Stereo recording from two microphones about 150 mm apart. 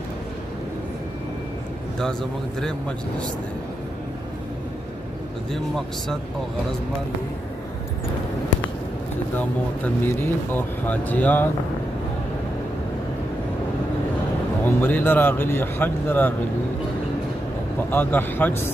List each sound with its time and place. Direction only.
5.5 s speech: centre (ahead or behind)
10.0 s speech: 15° left (ahead or behind)
14.6 s speech: 10° left (ahead or behind)
17.7 s speech: 15° left (ahead or behind)